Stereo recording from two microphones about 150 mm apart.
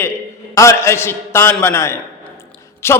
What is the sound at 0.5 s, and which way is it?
A man's voice, 20° left (ahead or behind).